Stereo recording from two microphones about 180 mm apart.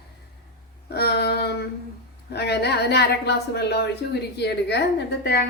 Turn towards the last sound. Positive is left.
turn(degrees=65)  # may be behind; listen again after turning